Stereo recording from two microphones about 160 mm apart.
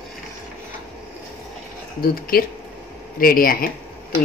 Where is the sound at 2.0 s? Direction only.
65° left (ahead or behind).